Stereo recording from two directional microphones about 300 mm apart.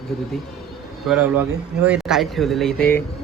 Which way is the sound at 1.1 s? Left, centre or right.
Centre.